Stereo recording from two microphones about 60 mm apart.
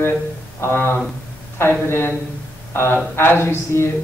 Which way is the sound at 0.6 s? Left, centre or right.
Left.